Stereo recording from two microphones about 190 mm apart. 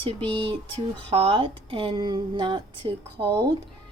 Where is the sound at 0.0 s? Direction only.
30° right (ahead or behind).